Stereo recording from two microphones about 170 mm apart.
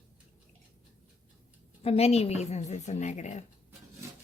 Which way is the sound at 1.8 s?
35° left (ahead or behind).